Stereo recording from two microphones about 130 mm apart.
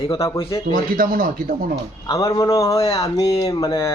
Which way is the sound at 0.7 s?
90° right.